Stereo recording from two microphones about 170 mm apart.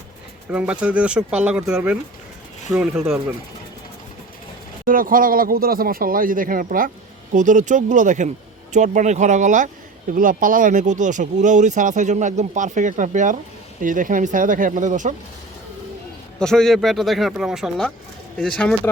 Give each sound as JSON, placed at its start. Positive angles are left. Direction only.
{"t": 0.5, "sound": "speech", "side_deg": -5}
{"t": 4.9, "sound": "speech", "side_deg": -55}
{"t": 16.4, "sound": "speech", "side_deg": 5}